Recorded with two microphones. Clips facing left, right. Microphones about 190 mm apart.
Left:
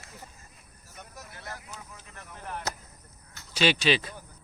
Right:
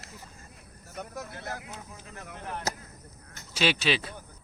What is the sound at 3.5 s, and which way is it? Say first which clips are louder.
Speech: left 2 dB; 5° right (ahead or behind).